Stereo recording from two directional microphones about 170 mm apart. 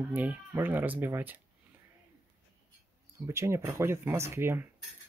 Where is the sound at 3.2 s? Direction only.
15° right (ahead or behind).